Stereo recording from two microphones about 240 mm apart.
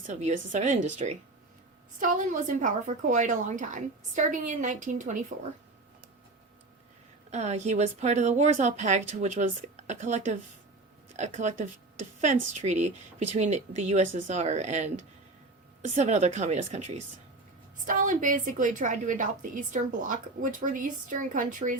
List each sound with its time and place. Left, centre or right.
0.1 s a woman's voice: right
7.3 s a woman's voice: right
17.8 s a woman's voice: right